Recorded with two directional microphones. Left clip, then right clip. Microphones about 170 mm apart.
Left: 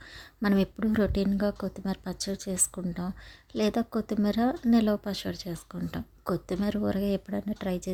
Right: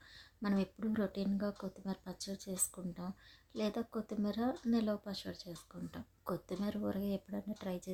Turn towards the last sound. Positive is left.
turn(degrees=35)  # may be behind; listen again after turning